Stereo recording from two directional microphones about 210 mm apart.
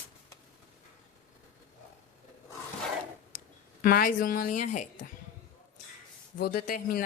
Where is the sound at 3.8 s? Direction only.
45° left (ahead or behind).